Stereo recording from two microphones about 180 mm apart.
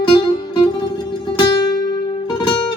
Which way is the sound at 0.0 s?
25° left (ahead or behind).